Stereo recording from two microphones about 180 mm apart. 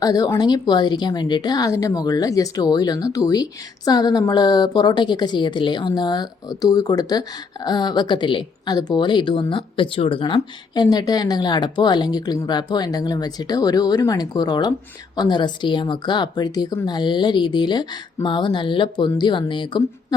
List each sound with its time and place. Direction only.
0.0 s a woman's voice: 20° left (ahead or behind)